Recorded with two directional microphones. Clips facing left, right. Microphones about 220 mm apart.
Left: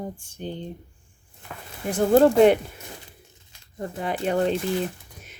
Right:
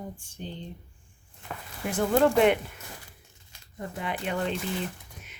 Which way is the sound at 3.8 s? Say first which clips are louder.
Left 5 dB; 40° left (ahead or behind).